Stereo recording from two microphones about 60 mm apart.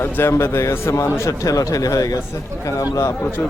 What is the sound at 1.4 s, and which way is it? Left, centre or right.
Speech, left.